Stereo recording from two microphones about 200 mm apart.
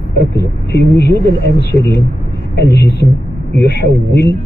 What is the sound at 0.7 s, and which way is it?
Speech, 55° left (ahead or behind).